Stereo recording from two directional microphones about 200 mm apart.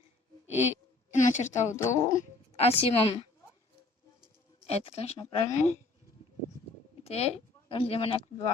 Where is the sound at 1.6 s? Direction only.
15° left (ahead or behind).